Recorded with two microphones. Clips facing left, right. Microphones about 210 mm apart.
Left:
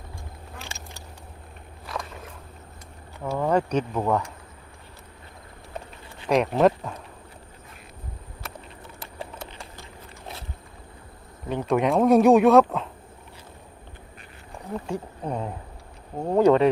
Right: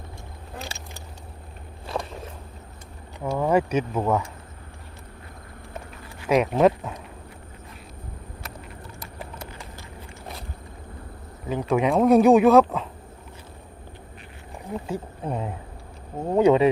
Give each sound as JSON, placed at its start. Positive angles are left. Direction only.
{"t": 1.9, "sound": "a sound", "side_deg": -25}
{"t": 3.3, "sound": "speech", "side_deg": -5}
{"t": 6.2, "sound": "speech", "side_deg": 0}
{"t": 11.4, "sound": "speech", "side_deg": 0}
{"t": 14.7, "sound": "speech", "side_deg": -5}